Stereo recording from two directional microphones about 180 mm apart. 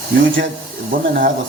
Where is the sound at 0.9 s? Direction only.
50° right (ahead or behind).